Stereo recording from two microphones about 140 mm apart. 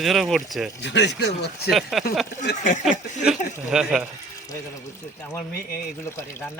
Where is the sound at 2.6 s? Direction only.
60° left (ahead or behind).